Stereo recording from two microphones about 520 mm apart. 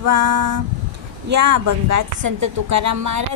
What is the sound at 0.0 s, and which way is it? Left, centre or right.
A woman's voice, right.